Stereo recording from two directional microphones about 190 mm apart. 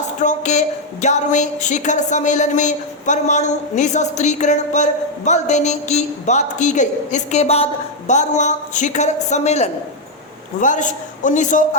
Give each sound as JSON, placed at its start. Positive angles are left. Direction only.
{"t": 0.0, "sound": "a woman's voice", "side_deg": 40}